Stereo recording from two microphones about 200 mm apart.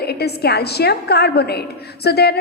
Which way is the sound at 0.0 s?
55° left (ahead or behind).